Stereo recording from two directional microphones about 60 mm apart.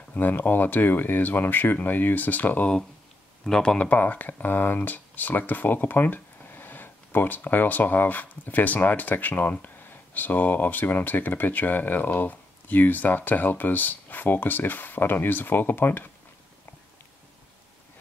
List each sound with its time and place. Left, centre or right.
0.1 s speech: left
3.4 s speech: centre; by 16.1 s left